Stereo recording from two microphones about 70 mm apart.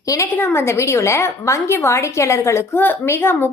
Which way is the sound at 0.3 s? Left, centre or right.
Left.